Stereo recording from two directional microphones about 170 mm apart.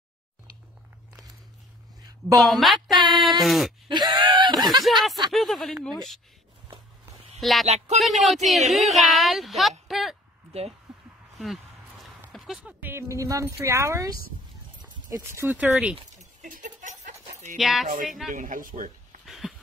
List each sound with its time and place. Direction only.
2.4 s speech: centre (ahead or behind)
3.9 s speech: 25° right (ahead or behind)
4.8 s speech: centre (ahead or behind)
7.3 s speech: centre (ahead or behind)
7.6 s speech: 40° right (ahead or behind)
8.0 s speech: centre (ahead or behind)
10.9 s a sound: 5° right (ahead or behind)
12.3 s speech: centre (ahead or behind)
16.2 s a sound: 50° right (ahead or behind)
17.6 s speech: centre (ahead or behind)
18.3 s speech: 50° right (ahead or behind)
19.2 s a sound: centre (ahead or behind)